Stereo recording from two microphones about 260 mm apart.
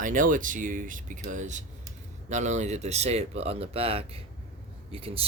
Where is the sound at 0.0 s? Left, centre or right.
Right.